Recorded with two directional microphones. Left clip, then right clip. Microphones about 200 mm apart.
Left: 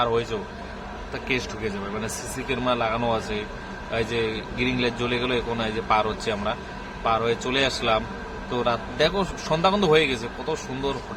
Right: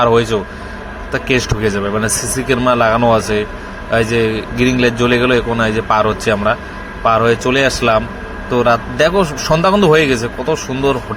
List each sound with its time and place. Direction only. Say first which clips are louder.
0.0 s a man's voice: right 12 dB; 15° right (ahead or behind)